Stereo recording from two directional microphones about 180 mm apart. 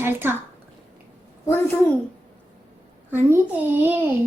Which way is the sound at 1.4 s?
10° left (ahead or behind).